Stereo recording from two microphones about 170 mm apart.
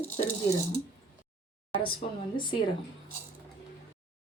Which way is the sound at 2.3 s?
25° left (ahead or behind).